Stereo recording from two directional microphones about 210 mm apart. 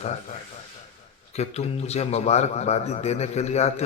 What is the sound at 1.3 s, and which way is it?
A man's voice, 30° left (ahead or behind).